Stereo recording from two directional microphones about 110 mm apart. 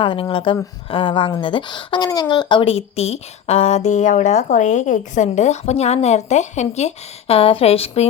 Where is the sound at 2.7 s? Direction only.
70° left (ahead or behind).